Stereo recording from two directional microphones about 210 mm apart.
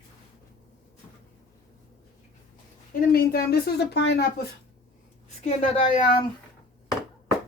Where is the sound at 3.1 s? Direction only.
45° left (ahead or behind).